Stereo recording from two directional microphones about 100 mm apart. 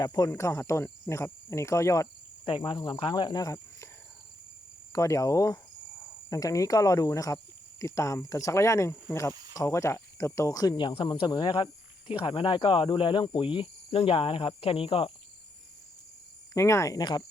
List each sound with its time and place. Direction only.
0.0 s speech: 40° left (ahead or behind)
0.3 s speech: 25° left (ahead or behind)
2.5 s speech: 55° left (ahead or behind); by 3.8 s 35° left (ahead or behind)
4.9 s speech: 30° left (ahead or behind)
9.3 s snake: 40° right (ahead or behind)
9.6 s speech: 30° left (ahead or behind)
10.8 s speech: 55° left (ahead or behind)
16.6 s speech: 30° left (ahead or behind)
17.0 s speech: 45° left (ahead or behind)